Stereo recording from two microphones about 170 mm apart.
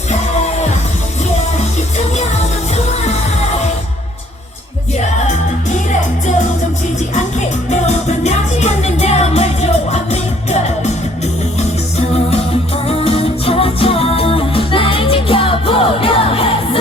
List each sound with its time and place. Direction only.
0.1 s music: 40° left (ahead or behind)
2.1 s music: 40° left (ahead or behind)
4.9 s music: 45° left (ahead or behind)
7.1 s music: 45° left (ahead or behind)